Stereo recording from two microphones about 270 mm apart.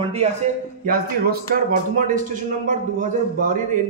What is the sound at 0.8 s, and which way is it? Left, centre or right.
A man's voice, right.